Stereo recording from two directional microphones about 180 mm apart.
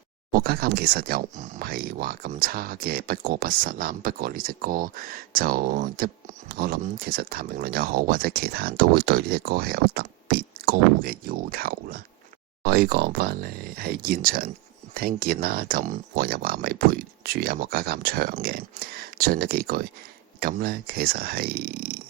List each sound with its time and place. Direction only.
0.3 s speech: 55° right (ahead or behind)